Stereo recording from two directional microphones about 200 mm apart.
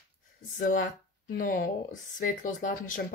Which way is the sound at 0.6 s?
40° left (ahead or behind).